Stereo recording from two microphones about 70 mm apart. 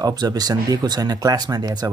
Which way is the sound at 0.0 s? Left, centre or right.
Right.